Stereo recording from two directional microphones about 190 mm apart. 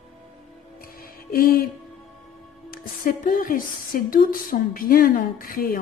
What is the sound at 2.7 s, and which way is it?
Speech, 50° left (ahead or behind).